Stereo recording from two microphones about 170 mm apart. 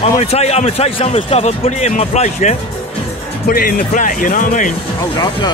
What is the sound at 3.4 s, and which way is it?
Speech, 60° left (ahead or behind).